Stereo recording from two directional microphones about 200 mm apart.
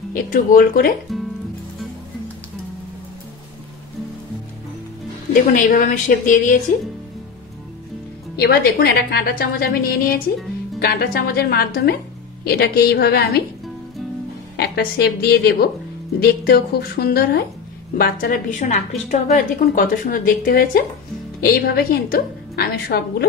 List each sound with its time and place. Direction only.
0.1 s a woman's voice: 45° left (ahead or behind)
5.3 s a woman's voice: 40° left (ahead or behind)
8.4 s a woman's voice: 50° left (ahead or behind)
14.6 s a woman's voice: 50° left (ahead or behind)
18.6 s a woman's voice: 35° left (ahead or behind); by 23.2 s 50° left (ahead or behind)